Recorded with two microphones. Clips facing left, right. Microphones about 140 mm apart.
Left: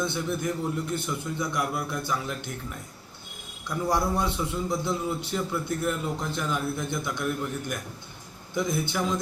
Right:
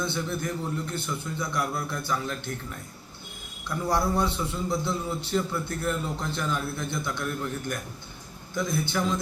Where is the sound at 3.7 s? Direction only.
15° left (ahead or behind).